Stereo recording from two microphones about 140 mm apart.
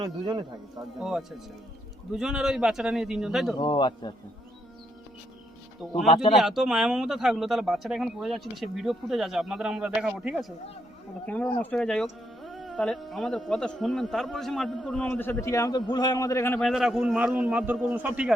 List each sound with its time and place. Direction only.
0.0 s speech: 30° right (ahead or behind)
0.9 s speech: centre (ahead or behind)
3.6 s a man's voice: 35° left (ahead or behind)
5.8 s speech: 5° right (ahead or behind)
11.3 s speech: 10° left (ahead or behind)
16.6 s speech: centre (ahead or behind)